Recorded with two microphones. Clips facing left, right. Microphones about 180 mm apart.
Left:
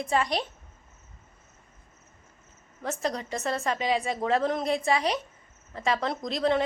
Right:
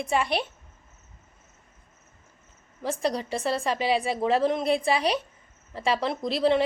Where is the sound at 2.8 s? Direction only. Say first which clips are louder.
Right 3 dB; 10° right (ahead or behind).